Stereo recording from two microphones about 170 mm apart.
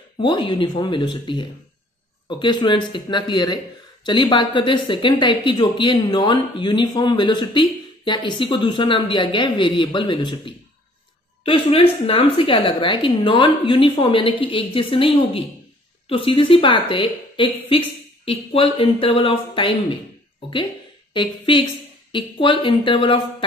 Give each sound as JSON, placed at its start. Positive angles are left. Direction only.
{"t": 0.2, "sound": "a woman's voice", "side_deg": 30}
{"t": 21.1, "sound": "speech", "side_deg": 30}